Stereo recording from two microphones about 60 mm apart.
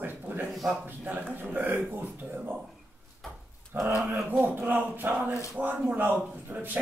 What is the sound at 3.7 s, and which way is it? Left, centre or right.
A man's voice, right.